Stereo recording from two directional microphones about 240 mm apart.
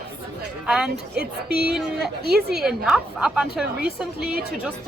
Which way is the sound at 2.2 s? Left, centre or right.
Right.